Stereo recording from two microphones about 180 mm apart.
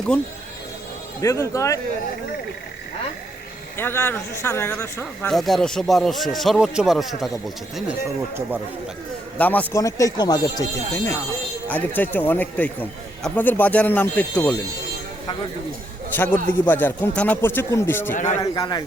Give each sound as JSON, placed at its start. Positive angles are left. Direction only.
{"t": 1.2, "sound": "a man's voice", "side_deg": 15}
{"t": 3.8, "sound": "a man's voice", "side_deg": 10}
{"t": 5.3, "sound": "speech", "side_deg": 0}
{"t": 9.4, "sound": "a man's voice", "side_deg": 10}
{"t": 16.1, "sound": "a man's voice", "side_deg": 10}
{"t": 18.1, "sound": "a man's voice", "side_deg": 45}
{"t": 18.3, "sound": "a man's voice", "side_deg": 20}